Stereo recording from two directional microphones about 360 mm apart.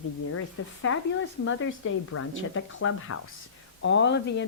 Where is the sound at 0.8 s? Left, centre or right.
Left.